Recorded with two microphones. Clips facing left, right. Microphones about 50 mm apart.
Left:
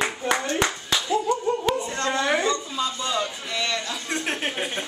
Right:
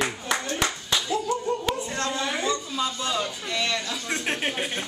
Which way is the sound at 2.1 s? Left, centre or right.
Left.